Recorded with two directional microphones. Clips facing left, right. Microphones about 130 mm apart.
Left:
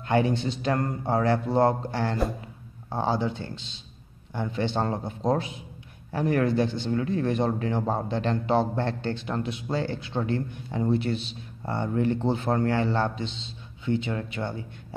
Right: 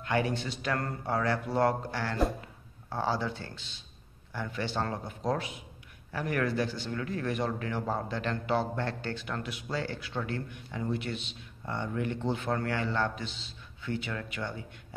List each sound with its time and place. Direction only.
0.0 s a man's voice: 25° left (ahead or behind)